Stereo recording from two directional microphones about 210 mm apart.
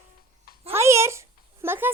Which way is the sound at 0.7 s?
15° right (ahead or behind).